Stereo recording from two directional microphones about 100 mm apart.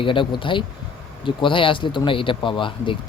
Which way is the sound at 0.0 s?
55° left (ahead or behind).